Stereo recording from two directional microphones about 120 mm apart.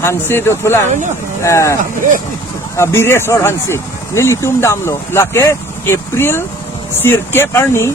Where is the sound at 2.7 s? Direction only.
20° left (ahead or behind).